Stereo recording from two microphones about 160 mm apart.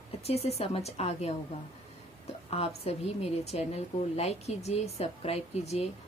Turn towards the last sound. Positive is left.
turn(degrees=40)  # may be behind; listen again after turning